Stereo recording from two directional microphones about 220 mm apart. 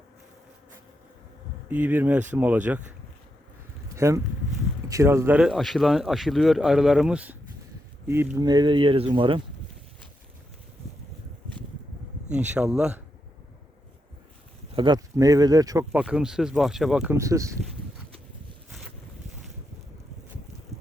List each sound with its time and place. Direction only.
1.7 s speech: 10° right (ahead or behind)
3.9 s speech: 15° right (ahead or behind)
12.5 s speech: 5° right (ahead or behind)
14.8 s speech: 20° right (ahead or behind)